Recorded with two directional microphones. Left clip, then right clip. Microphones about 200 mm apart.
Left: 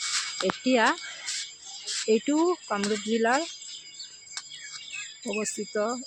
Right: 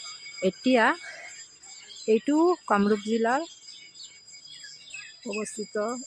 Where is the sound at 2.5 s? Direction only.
20° right (ahead or behind).